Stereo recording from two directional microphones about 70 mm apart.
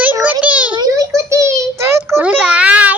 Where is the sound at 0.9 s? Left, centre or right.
Right.